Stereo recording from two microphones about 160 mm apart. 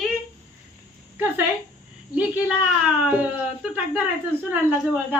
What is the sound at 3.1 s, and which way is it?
A woman's voice, 10° right (ahead or behind).